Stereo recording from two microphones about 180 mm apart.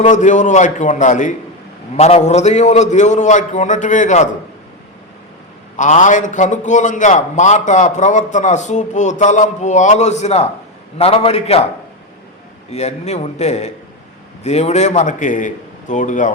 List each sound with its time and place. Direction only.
0.0 s a man's voice: 40° left (ahead or behind)
5.7 s a man's voice: 40° left (ahead or behind)
12.7 s a man's voice: 35° left (ahead or behind)